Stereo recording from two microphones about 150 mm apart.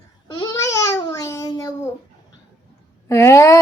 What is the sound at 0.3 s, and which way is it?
Babbling, 20° left (ahead or behind).